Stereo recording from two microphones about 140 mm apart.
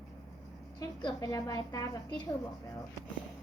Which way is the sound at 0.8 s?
25° left (ahead or behind).